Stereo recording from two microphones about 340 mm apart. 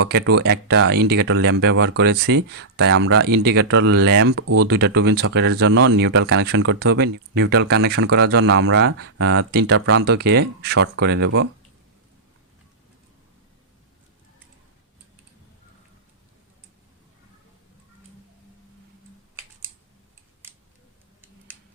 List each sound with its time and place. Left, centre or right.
0.0 s speech: right